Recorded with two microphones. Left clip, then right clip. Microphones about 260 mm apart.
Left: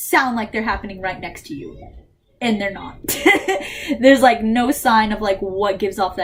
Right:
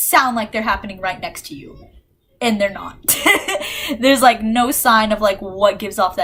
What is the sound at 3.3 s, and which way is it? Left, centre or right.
Speech, right.